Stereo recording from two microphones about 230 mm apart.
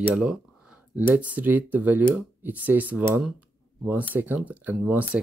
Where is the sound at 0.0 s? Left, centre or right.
Centre.